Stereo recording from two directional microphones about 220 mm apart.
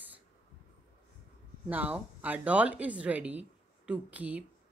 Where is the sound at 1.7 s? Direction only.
5° right (ahead or behind).